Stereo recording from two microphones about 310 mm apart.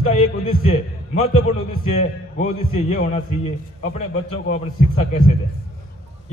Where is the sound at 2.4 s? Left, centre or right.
Left.